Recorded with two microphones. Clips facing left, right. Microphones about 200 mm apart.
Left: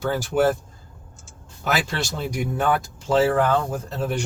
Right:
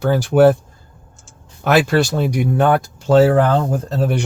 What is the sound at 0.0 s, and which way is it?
Speech, 65° right (ahead or behind).